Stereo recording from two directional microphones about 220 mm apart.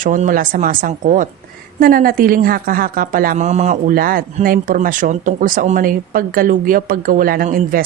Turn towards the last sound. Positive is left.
turn(degrees=-40)  # may be behind; listen again after turning